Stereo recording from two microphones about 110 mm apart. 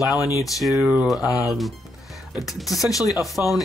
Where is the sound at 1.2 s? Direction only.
30° left (ahead or behind).